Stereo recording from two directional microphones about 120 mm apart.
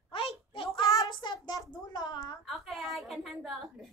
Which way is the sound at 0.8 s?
35° left (ahead or behind).